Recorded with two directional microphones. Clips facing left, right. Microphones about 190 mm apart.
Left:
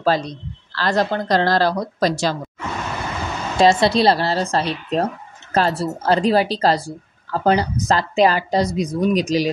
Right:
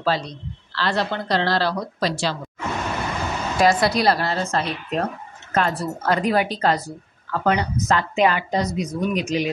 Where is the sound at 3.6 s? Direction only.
25° left (ahead or behind).